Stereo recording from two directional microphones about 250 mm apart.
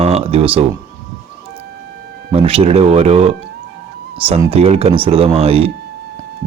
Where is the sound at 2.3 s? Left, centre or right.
Right.